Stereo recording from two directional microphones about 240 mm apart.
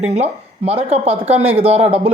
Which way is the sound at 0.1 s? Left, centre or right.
Right.